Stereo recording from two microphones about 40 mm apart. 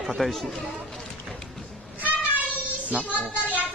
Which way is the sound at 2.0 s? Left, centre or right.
Right.